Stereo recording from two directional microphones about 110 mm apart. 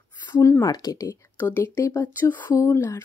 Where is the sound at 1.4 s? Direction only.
20° left (ahead or behind).